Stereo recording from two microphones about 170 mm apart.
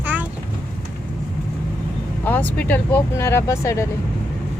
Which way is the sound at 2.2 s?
10° left (ahead or behind).